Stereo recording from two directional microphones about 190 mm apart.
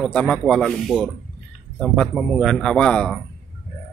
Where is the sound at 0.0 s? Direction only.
5° left (ahead or behind).